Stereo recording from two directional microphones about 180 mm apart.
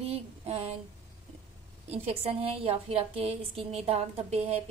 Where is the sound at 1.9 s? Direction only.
35° right (ahead or behind).